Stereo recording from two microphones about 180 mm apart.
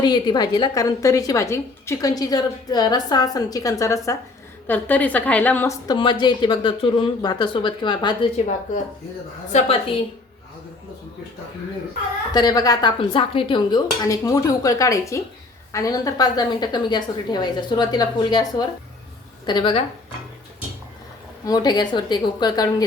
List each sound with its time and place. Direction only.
0.0 s a woman's voice: 25° left (ahead or behind)
5.9 s a woman's voice: 25° left (ahead or behind)
9.5 s a woman's voice: 35° left (ahead or behind)
12.3 s a woman's voice: 20° left (ahead or behind)
21.4 s a woman's voice: 20° left (ahead or behind)